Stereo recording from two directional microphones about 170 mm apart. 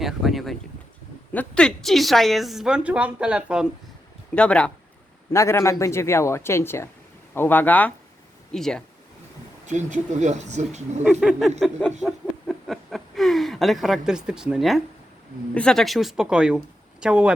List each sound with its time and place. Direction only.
0.0 s a woman's voice: centre (ahead or behind)
4.4 s a woman's voice: 5° left (ahead or behind)
9.6 s speech: 45° right (ahead or behind)
11.0 s a woman's voice: 5° right (ahead or behind)